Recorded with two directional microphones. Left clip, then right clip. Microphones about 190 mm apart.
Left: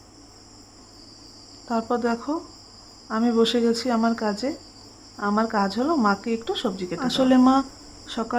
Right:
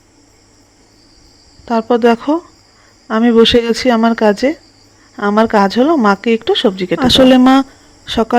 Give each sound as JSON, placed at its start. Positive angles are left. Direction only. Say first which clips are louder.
{"t": 1.6, "sound": "speech", "louder": "right 13 dB", "side_deg": -30}